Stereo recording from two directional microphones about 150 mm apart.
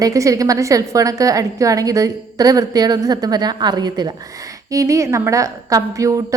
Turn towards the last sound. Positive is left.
turn(degrees=-20)  # may be behind; listen again after turning